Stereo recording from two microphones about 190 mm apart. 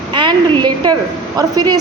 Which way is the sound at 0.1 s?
25° right (ahead or behind).